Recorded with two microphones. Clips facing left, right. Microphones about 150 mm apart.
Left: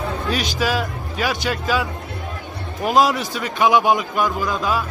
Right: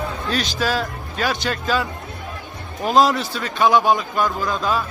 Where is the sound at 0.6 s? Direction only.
10° left (ahead or behind).